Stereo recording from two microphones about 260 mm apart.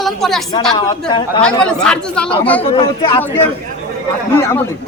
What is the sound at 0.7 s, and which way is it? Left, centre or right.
Speech, centre.